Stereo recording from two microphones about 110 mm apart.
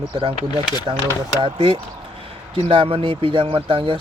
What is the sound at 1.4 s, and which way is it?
Speech, 60° right (ahead or behind).